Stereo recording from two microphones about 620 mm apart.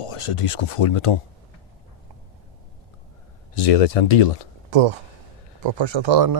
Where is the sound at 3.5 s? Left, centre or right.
Left.